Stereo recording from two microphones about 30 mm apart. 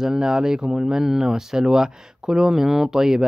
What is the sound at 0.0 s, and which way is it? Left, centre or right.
Speech, right.